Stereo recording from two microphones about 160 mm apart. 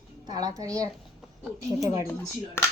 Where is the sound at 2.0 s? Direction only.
20° left (ahead or behind).